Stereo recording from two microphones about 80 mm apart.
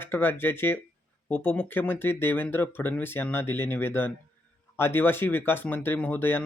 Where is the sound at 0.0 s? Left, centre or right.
Left.